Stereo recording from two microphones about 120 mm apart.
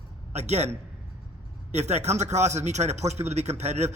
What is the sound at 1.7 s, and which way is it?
A man's voice, 65° right (ahead or behind).